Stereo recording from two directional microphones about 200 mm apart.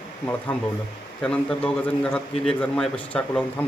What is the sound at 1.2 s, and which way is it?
Speech, 5° left (ahead or behind).